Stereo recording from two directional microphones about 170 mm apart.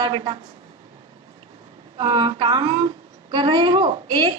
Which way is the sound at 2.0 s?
30° right (ahead or behind).